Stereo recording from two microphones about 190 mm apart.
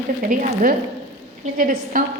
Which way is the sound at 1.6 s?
45° right (ahead or behind).